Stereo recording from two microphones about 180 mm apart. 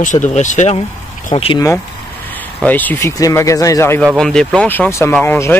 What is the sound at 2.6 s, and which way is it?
Speech, 10° left (ahead or behind).